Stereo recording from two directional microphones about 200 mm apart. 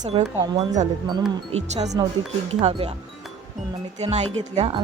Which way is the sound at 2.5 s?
30° right (ahead or behind).